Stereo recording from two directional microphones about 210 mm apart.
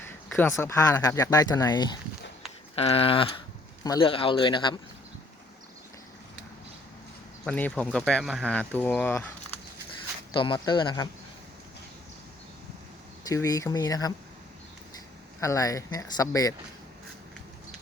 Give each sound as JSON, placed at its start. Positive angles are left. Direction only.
{"t": 0.0, "sound": "speech", "side_deg": 10}
{"t": 7.4, "sound": "speech", "side_deg": 5}
{"t": 10.3, "sound": "speech", "side_deg": 25}
{"t": 13.2, "sound": "speech", "side_deg": 15}
{"t": 15.4, "sound": "speech", "side_deg": 15}